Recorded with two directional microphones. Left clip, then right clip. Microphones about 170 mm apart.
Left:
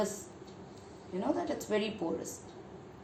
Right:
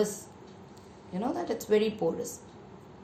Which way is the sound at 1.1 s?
40° right (ahead or behind).